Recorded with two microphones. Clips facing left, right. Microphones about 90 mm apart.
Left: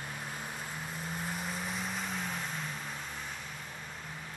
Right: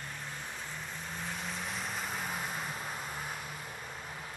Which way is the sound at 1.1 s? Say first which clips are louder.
Left 1 dB; 5° left (ahead or behind).